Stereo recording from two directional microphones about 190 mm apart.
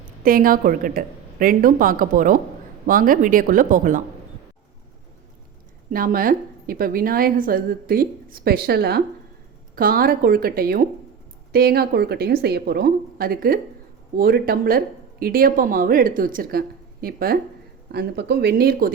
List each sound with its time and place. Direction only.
0.2 s a woman's voice: 50° right (ahead or behind)
5.9 s a woman's voice: 45° right (ahead or behind)